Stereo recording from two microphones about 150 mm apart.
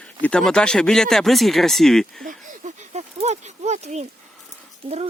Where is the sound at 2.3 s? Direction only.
50° right (ahead or behind).